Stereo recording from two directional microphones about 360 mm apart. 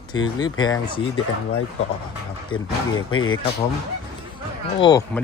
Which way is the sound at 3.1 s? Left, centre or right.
Left.